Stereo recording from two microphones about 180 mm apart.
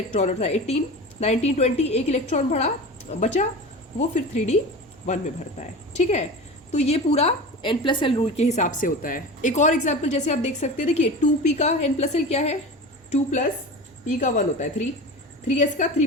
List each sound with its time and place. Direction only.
0.1 s a woman's voice: 40° left (ahead or behind)